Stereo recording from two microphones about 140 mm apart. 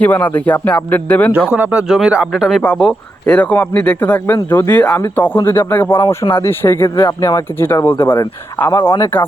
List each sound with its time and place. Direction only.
0.0 s speech: 10° left (ahead or behind)
1.5 s speech: 10° right (ahead or behind); by 9.2 s 15° left (ahead or behind)